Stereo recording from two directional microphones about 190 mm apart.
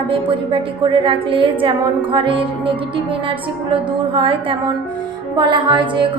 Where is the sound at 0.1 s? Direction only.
25° right (ahead or behind).